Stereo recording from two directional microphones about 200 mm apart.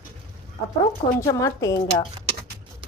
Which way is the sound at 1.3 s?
15° left (ahead or behind).